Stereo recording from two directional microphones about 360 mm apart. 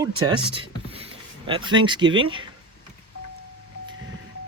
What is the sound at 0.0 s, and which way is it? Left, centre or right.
Speech, centre.